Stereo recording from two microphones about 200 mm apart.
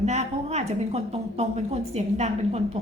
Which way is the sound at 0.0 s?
35° right (ahead or behind).